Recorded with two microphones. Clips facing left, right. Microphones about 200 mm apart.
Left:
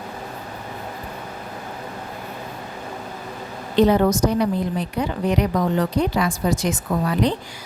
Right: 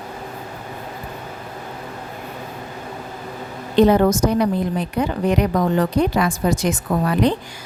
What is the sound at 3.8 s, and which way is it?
Speech, 50° right (ahead or behind).